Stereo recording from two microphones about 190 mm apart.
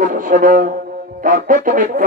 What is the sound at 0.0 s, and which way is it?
Music, 45° right (ahead or behind).